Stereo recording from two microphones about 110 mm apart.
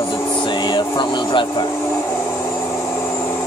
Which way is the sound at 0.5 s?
45° left (ahead or behind).